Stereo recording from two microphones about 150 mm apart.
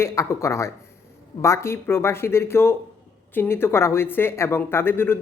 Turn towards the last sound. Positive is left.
turn(degrees=15)  # may be behind; listen again after turning